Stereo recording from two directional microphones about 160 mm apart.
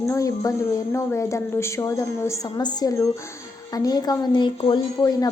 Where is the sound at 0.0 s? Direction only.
20° left (ahead or behind).